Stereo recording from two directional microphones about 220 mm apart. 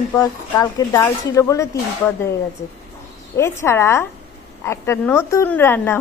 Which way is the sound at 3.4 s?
10° left (ahead or behind).